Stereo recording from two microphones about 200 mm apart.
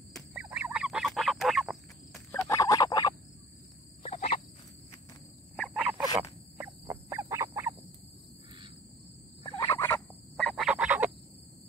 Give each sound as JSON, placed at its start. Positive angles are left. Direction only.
{"t": 0.1, "sound": "a sound", "side_deg": -5}
{"t": 2.3, "sound": "a sound", "side_deg": 15}
{"t": 4.0, "sound": "frog", "side_deg": 30}
{"t": 5.6, "sound": "frog", "side_deg": -5}
{"t": 9.4, "sound": "turkey", "side_deg": 20}
{"t": 10.3, "sound": "frog", "side_deg": 0}